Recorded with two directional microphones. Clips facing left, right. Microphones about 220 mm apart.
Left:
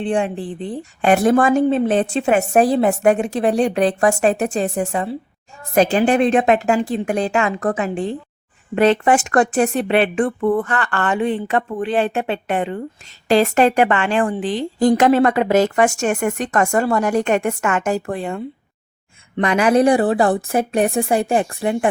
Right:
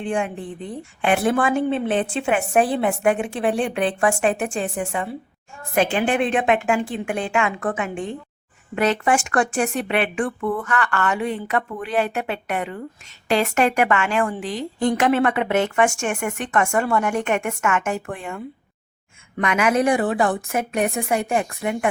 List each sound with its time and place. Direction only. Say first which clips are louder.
0.0 s speech: left 4 dB; 35° left (ahead or behind)